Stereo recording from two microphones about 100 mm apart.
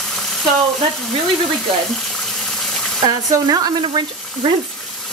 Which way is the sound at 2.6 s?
5° left (ahead or behind).